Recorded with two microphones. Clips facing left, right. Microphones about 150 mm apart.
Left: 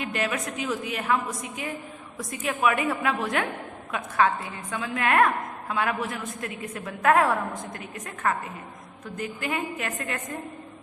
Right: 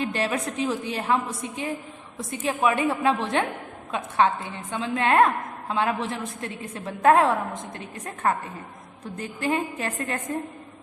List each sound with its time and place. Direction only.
0.0 s a woman's voice: 30° right (ahead or behind)